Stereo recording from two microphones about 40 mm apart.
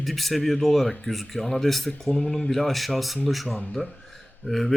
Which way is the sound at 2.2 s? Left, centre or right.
Centre.